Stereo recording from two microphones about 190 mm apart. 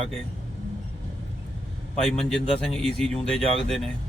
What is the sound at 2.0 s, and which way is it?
Speech, centre (ahead or behind).